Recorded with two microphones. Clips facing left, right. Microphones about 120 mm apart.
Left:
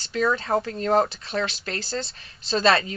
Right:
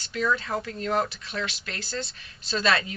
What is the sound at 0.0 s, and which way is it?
Speech, 35° left (ahead or behind).